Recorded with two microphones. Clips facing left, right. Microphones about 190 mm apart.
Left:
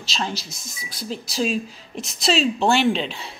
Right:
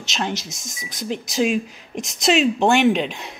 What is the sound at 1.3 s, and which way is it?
A woman's voice, 15° right (ahead or behind).